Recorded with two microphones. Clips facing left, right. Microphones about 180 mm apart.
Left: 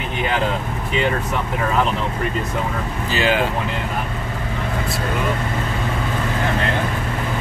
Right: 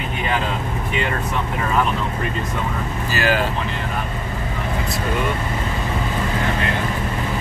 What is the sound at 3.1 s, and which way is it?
Speech, 20° left (ahead or behind).